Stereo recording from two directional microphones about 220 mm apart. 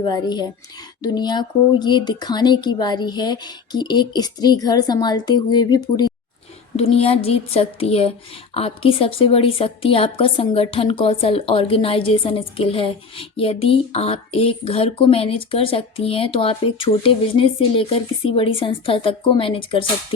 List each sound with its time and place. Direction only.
0.0 s speech: 20° left (ahead or behind)
6.7 s speech: 25° left (ahead or behind)